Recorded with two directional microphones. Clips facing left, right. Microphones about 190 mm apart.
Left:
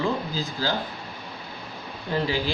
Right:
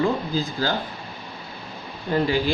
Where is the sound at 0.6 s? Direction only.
50° right (ahead or behind).